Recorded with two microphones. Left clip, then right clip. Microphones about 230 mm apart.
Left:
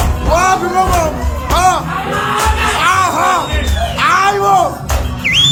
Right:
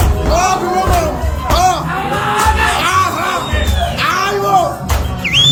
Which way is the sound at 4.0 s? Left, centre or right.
Centre.